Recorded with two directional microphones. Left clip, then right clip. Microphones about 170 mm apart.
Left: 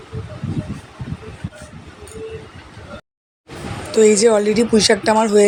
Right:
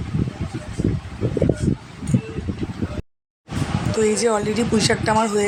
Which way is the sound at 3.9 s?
25° left (ahead or behind).